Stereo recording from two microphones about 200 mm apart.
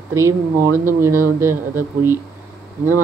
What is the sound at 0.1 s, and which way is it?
Speech, 15° right (ahead or behind).